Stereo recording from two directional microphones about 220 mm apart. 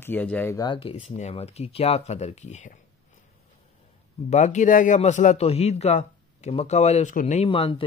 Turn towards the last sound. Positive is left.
turn(degrees=25)  # may be behind; listen again after turning